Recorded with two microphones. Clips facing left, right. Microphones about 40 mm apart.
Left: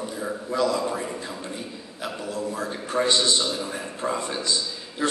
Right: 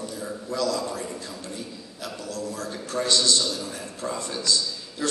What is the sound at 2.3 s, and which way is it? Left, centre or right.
A man's voice, left.